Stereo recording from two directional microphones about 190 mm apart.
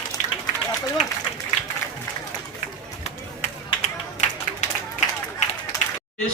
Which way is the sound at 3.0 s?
35° left (ahead or behind).